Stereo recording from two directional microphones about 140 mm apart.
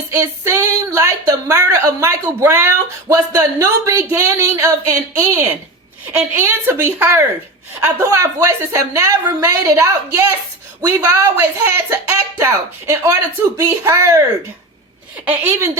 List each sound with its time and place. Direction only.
0.1 s a woman's voice: 20° right (ahead or behind)
15.2 s a woman's voice: 15° right (ahead or behind)